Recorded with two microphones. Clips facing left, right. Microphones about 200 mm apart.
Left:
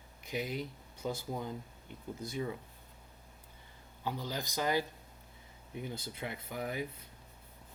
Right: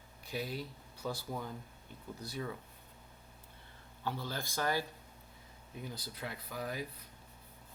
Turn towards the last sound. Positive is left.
turn(degrees=20)  # may be behind; listen again after turning